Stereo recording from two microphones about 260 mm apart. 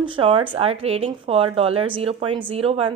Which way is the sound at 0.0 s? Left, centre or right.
Centre.